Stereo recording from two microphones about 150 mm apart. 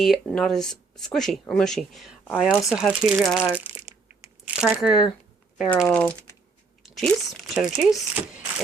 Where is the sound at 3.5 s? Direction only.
20° right (ahead or behind).